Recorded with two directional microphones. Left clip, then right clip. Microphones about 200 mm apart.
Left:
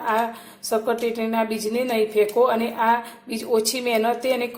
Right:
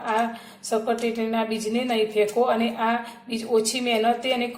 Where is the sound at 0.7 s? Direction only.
35° left (ahead or behind).